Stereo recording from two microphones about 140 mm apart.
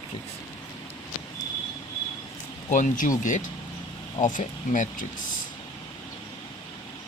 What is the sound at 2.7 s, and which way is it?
Speech, 70° left (ahead or behind).